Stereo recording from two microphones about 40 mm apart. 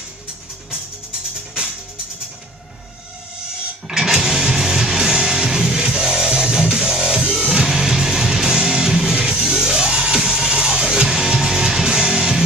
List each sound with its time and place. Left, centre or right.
3.8 s music: centre